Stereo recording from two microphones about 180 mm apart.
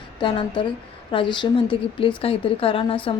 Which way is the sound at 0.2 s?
25° left (ahead or behind).